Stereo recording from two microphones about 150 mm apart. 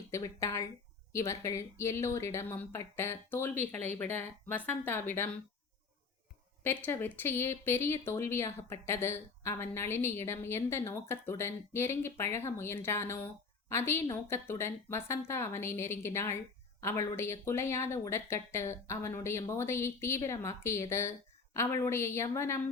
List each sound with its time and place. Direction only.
0.1 s speech: 20° left (ahead or behind)
6.6 s speech: 15° left (ahead or behind)